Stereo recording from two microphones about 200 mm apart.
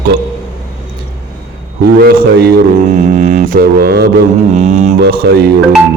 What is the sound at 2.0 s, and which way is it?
Music, 50° right (ahead or behind).